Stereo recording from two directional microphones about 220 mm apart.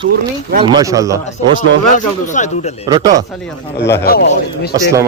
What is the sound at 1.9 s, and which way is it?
Speech, 35° left (ahead or behind).